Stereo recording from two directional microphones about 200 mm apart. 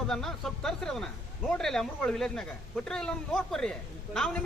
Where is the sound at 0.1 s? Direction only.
Centre (ahead or behind).